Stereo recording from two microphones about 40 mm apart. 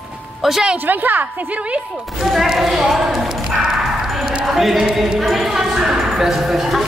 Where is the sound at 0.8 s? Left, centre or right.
Right.